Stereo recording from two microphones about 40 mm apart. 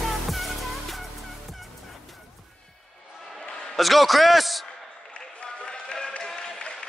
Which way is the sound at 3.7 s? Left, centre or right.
Centre.